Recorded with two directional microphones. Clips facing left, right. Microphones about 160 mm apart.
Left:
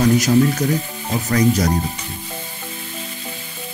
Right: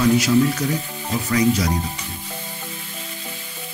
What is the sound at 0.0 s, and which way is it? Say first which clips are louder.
Speech: left 2 dB; 40° left (ahead or behind).